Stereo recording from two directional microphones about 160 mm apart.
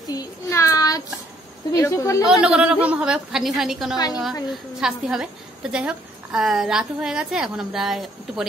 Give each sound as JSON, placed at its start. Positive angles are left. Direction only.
{"t": 0.0, "sound": "child singing", "side_deg": 25}
{"t": 1.7, "sound": "speech", "side_deg": 20}
{"t": 2.2, "sound": "a woman's voice", "side_deg": -5}